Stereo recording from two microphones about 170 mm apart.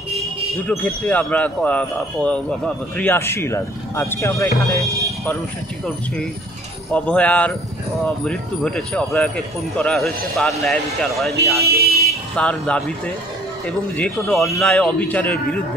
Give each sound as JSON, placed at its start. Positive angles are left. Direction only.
{"t": 0.7, "sound": "speech", "side_deg": 10}
{"t": 6.9, "sound": "speech", "side_deg": 5}
{"t": 11.6, "sound": "speech", "side_deg": -65}
{"t": 12.1, "sound": "speech", "side_deg": 5}